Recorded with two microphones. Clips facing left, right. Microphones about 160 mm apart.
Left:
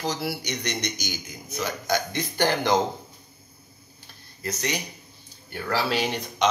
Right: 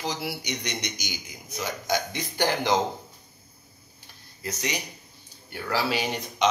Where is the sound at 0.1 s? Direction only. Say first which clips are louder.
Left 2 dB; 15° right (ahead or behind).